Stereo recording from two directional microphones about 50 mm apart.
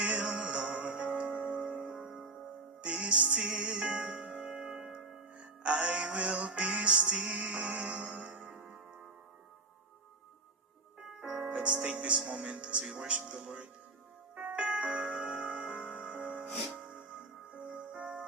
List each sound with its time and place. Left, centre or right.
0.0 s music: right
2.0 s music: centre
2.8 s music: right
5.4 s music: right
8.5 s music: centre
11.2 s music: centre
12.9 s speech: right
14.3 s music: right